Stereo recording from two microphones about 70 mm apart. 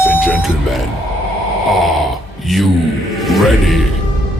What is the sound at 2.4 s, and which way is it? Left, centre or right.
Speech, centre.